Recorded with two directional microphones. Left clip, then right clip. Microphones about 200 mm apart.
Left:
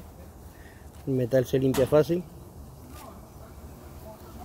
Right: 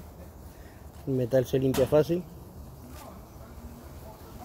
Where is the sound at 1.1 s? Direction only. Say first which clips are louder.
Left 1 dB; 15° left (ahead or behind).